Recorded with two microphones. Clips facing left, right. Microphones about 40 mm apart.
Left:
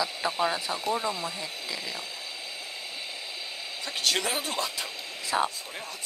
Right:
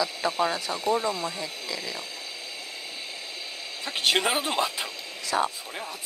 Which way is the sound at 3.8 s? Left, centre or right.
Right.